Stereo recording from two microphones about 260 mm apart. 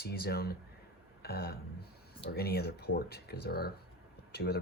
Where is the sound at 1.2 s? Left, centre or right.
Left.